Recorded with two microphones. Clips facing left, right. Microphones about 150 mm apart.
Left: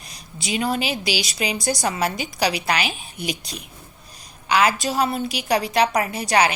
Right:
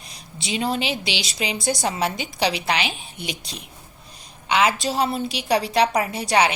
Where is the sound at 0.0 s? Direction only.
30° right (ahead or behind).